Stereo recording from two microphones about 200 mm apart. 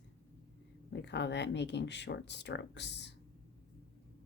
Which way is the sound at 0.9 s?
60° left (ahead or behind).